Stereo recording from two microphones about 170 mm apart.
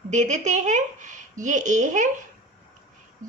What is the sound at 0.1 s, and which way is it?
A woman's voice, 45° right (ahead or behind).